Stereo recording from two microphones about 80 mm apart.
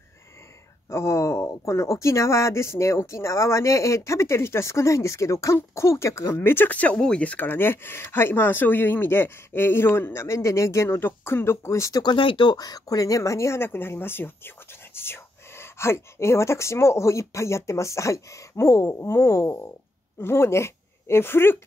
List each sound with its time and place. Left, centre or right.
0.8 s speech: left
12.0 s speech: left
12.5 s speech: left